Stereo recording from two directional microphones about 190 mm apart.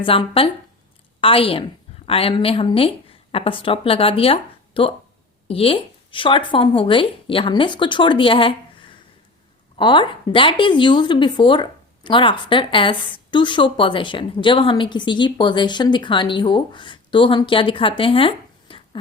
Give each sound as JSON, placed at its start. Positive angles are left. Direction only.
{"t": 0.0, "sound": "speech", "side_deg": 30}